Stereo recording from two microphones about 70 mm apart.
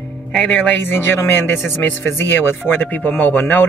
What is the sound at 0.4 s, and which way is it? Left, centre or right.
Speech, left.